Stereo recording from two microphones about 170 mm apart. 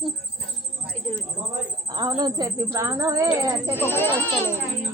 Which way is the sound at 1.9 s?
25° right (ahead or behind).